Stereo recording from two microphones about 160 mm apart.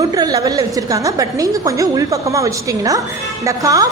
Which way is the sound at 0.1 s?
25° right (ahead or behind).